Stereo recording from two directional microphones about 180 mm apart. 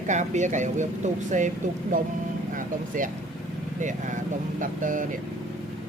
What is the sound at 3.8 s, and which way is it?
Speech, 45° right (ahead or behind).